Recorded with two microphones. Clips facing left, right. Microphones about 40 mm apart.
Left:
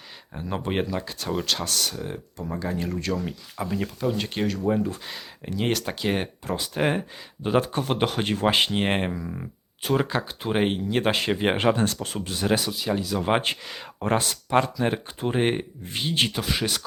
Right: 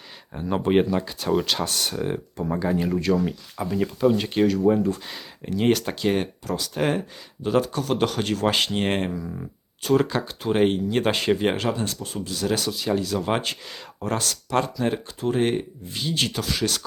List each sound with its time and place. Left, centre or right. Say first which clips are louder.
0.3 s speech: right 6 dB; centre
1.6 s speech: right 3 dB; right
2.5 s speech: right 5 dB; centre
6.4 s speech: right 1 dB; left
6.7 s speech: even; centre
7.4 s speech: right 1 dB; left
7.9 s speech: right 3 dB; centre
9.2 s speech: right 1 dB; centre
11.5 s speech: left 4 dB; left
12.5 s speech: right 2 dB; centre
13.5 s speech: left 2 dB; left
14.8 s speech: even; centre
15.9 s speech: left 1 dB; left
16.3 s speech: right 1 dB; left